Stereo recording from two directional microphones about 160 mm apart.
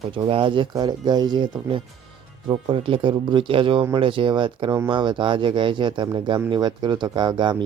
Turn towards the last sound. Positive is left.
turn(degrees=-30)  # may be behind; listen again after turning